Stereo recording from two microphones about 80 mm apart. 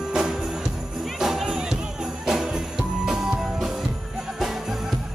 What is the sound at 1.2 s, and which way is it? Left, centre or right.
Music, centre.